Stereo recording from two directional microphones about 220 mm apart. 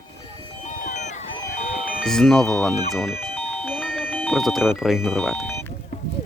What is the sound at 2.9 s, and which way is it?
Music, centre (ahead or behind).